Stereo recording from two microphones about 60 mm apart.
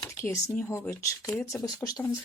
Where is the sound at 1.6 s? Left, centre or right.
Left.